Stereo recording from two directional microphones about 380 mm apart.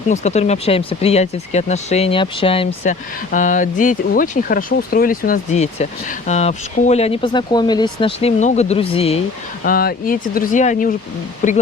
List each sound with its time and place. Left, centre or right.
0.1 s speech: centre